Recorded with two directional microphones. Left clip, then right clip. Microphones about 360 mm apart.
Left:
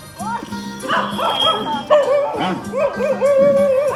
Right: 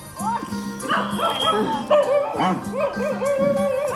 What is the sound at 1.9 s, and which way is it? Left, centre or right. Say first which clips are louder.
Music: left 4 dB; left.